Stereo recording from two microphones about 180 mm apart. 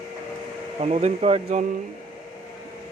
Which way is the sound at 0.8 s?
35° right (ahead or behind).